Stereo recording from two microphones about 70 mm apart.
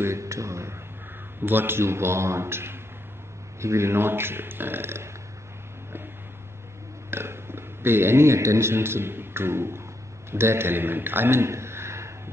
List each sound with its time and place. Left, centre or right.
0.0 s speech: right
1.4 s speech: right
7.1 s a man's voice: right